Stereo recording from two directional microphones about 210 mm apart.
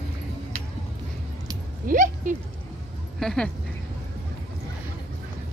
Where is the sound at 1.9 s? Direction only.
40° right (ahead or behind).